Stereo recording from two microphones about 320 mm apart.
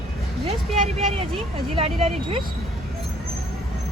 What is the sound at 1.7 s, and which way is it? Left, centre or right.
Speech, centre.